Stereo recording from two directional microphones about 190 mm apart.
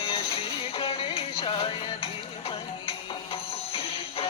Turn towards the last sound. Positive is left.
turn(degrees=30)  # may be behind; listen again after turning